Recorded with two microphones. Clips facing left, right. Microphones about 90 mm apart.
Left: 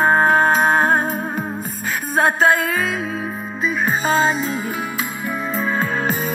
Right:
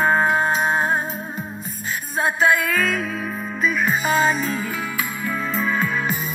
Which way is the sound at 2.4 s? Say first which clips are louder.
Even; 40° left (ahead or behind).